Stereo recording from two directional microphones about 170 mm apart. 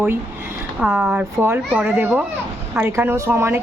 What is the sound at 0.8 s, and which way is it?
A woman's voice, 5° right (ahead or behind).